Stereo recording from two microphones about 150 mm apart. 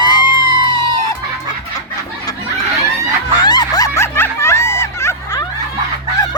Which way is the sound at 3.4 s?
30° left (ahead or behind).